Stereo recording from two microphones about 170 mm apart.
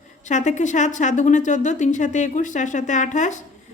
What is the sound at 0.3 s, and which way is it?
A woman's voice, 45° left (ahead or behind).